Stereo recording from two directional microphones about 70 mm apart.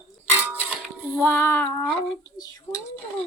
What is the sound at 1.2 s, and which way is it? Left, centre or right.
Child singing, left.